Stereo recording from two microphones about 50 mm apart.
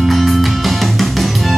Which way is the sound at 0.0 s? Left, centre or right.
Centre.